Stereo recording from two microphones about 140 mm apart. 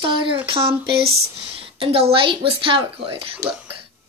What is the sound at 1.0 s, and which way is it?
Speech, 90° right.